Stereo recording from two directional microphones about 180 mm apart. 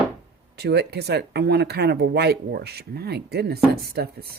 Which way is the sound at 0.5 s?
65° right (ahead or behind).